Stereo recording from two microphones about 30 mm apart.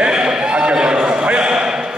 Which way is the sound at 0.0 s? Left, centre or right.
Right.